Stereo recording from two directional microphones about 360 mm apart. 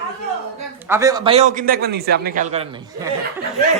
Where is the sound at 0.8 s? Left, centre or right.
Centre.